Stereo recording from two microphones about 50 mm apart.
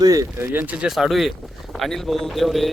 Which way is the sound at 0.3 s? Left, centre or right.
Right.